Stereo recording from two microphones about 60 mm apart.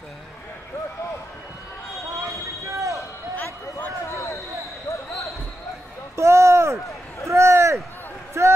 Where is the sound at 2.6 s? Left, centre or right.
Right.